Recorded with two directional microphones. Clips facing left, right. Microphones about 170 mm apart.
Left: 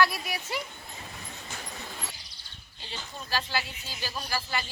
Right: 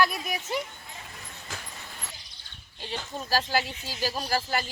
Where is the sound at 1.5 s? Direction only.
90° right.